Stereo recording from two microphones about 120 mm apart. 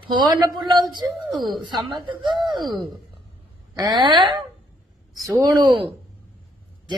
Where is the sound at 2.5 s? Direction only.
Centre (ahead or behind).